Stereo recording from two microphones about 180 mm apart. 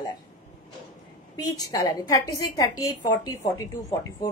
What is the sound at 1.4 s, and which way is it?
A woman's voice, 20° left (ahead or behind).